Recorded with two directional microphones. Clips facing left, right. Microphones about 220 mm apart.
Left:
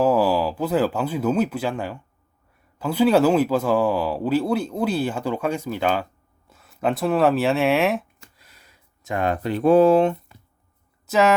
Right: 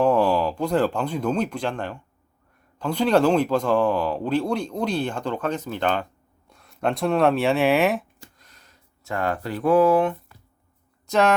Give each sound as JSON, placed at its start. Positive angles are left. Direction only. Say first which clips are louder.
{"t": 0.0, "sound": "speech", "louder": "left 1 dB", "side_deg": 5}
{"t": 8.4, "sound": "a sound", "louder": "even", "side_deg": 10}
{"t": 11.0, "sound": "speech", "louder": "left 1 dB", "side_deg": 5}